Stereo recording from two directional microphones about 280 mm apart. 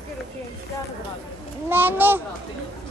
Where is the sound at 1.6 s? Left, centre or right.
Centre.